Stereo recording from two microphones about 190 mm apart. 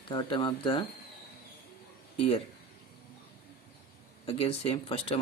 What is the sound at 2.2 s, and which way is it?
Speech, 30° left (ahead or behind).